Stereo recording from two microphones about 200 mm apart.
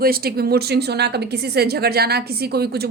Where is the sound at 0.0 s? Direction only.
50° right (ahead or behind).